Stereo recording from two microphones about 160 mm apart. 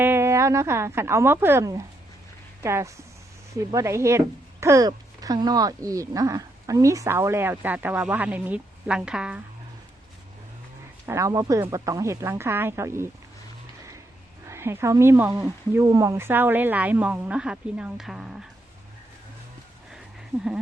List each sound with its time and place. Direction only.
0.0 s a woman's voice: 15° right (ahead or behind)
11.0 s speech: 20° right (ahead or behind)
14.4 s speech: 15° right (ahead or behind)